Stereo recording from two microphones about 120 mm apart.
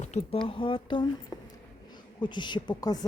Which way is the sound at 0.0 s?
70° left (ahead or behind).